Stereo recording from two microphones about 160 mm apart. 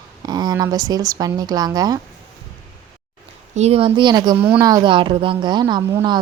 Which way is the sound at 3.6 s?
40° right (ahead or behind).